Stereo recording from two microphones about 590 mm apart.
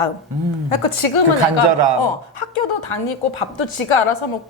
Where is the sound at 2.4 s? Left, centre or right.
Left.